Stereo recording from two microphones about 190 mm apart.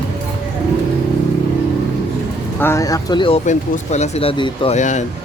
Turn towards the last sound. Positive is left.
turn(degrees=40)  # may be behind; listen again after turning